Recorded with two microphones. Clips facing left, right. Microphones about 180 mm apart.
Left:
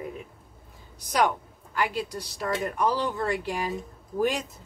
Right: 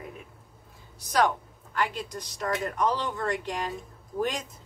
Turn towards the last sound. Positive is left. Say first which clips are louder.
# left 4 dB
turn(degrees=10)  # may be behind; listen again after turning